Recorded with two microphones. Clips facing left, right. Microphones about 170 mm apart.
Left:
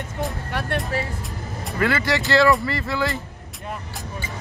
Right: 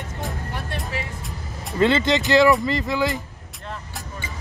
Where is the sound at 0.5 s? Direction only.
70° left (ahead or behind).